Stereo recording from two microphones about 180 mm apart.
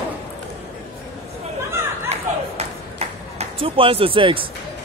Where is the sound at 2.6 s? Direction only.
35° right (ahead or behind).